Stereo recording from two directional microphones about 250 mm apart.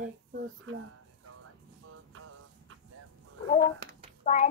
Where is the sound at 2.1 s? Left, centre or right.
Right.